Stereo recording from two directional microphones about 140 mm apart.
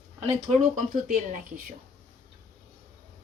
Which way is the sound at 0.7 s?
70° right (ahead or behind).